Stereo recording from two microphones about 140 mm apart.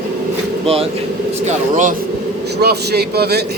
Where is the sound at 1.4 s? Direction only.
65° right (ahead or behind).